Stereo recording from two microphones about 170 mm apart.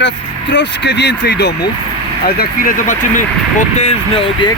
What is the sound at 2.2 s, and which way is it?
Speech, 60° left (ahead or behind).